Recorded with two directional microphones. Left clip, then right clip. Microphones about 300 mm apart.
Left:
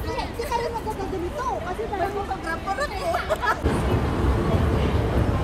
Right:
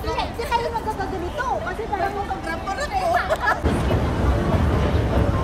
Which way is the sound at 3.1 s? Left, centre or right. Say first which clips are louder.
Right 3 dB; centre.